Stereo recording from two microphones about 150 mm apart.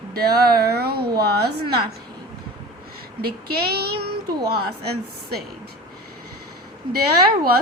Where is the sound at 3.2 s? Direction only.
90° right.